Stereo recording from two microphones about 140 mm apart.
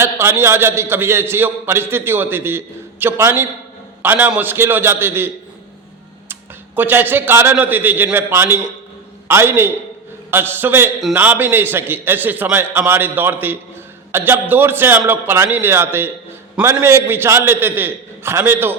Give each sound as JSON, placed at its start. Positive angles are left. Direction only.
{"t": 0.0, "sound": "a man's voice", "side_deg": -20}
{"t": 6.7, "sound": "a man's voice", "side_deg": -15}